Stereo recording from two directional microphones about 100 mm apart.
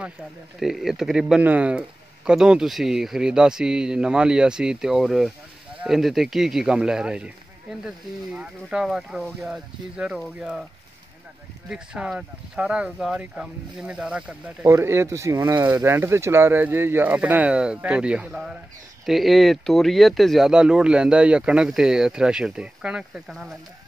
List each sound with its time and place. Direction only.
0.6 s speech: 5° right (ahead or behind)
11.7 s speech: 5° right (ahead or behind)
14.7 s speech: 25° right (ahead or behind); by 23.5 s 5° right (ahead or behind)